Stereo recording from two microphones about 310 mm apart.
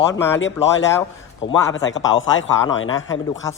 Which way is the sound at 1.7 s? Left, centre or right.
Left.